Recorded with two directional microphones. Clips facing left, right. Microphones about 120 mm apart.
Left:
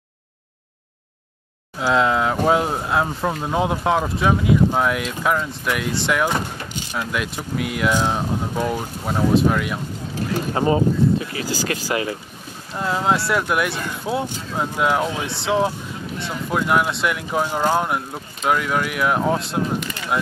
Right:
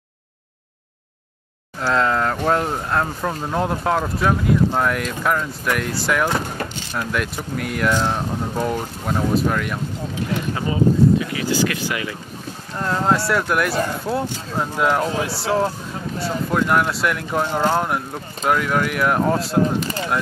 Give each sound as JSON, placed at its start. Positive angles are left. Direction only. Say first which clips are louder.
{"t": 1.8, "sound": "speech", "louder": "left 1 dB", "side_deg": 5}
{"t": 6.6, "sound": "vehicle", "louder": "right 6 dB", "side_deg": -50}
{"t": 7.0, "sound": "speech", "louder": "right 2 dB", "side_deg": 5}
{"t": 10.3, "sound": "speech", "louder": "left 6 dB", "side_deg": 35}
{"t": 12.7, "sound": "speech", "louder": "right 1 dB", "side_deg": 5}
{"t": 19.8, "sound": "speech", "louder": "right 5 dB", "side_deg": -35}